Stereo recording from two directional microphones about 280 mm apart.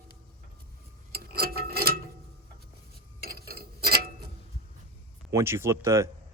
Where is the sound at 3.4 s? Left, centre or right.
Right.